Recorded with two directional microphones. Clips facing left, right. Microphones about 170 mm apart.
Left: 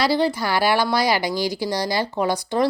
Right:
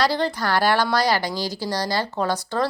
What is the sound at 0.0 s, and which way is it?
A woman's voice, 10° left (ahead or behind).